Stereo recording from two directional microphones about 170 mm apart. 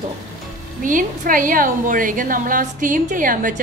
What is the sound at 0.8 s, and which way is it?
A woman's voice, 50° right (ahead or behind).